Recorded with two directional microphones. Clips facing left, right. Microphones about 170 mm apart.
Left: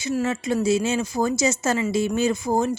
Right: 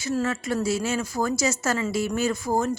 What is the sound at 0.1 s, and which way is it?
A woman's voice, 15° left (ahead or behind).